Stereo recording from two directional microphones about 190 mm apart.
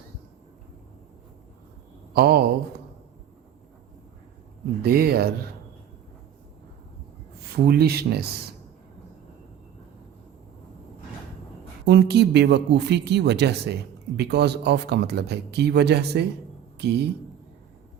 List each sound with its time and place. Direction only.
2.1 s speech: 55° right (ahead or behind)
4.8 s speech: 55° right (ahead or behind)
7.4 s speech: 55° right (ahead or behind)
11.9 s speech: 60° right (ahead or behind)